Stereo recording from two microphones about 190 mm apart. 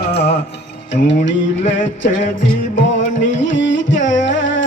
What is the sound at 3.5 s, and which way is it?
Music, 75° left (ahead or behind).